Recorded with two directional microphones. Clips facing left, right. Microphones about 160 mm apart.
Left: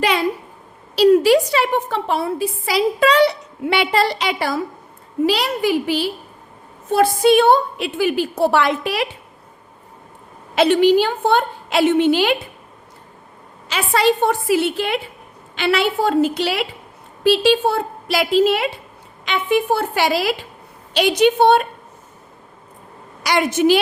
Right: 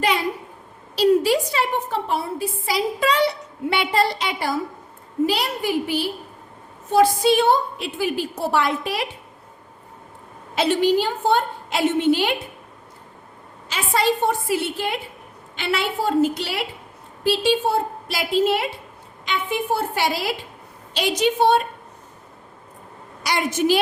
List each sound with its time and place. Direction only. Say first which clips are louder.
0.9 s a woman's voice: left 5 dB; 80° left
6.9 s a woman's voice: left 3 dB; 60° left (ahead or behind); by 9.0 s 85° left
10.5 s a woman's voice: left 5 dB; 70° left (ahead or behind); by 12.4 s 90° left
13.7 s a woman's voice: left 4 dB; 80° left
19.2 s a woman's voice: left 6 dB; 75° left (ahead or behind)
20.9 s a woman's voice: left 6 dB; 65° left (ahead or behind)
23.2 s a woman's voice: left 5 dB; 75° left (ahead or behind)